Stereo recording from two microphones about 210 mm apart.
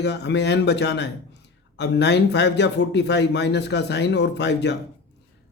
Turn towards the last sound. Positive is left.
turn(degrees=55)  # may be behind; listen again after turning